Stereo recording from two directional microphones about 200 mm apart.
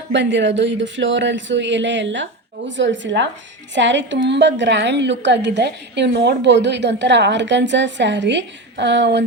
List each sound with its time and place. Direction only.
0.1 s a woman's voice: 65° right (ahead or behind)